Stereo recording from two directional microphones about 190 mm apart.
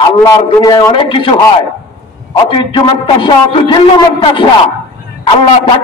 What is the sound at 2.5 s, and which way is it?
A man's voice, 25° left (ahead or behind).